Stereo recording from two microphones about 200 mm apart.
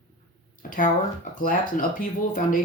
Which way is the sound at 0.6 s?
45° left (ahead or behind).